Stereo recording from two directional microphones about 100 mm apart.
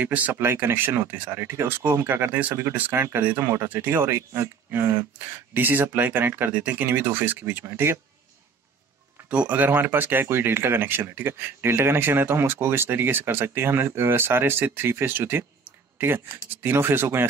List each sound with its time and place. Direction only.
0.0 s speech: 15° right (ahead or behind)
9.3 s speech: 15° right (ahead or behind)